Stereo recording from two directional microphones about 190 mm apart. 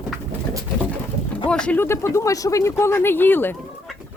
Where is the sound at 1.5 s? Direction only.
5° left (ahead or behind).